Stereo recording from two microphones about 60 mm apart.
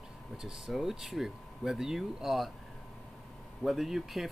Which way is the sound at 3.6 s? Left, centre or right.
Centre.